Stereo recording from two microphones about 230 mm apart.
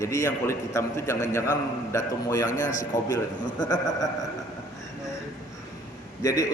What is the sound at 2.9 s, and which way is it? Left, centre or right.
A man's voice, centre.